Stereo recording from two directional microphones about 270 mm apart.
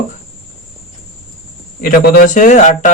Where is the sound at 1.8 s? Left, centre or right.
Left.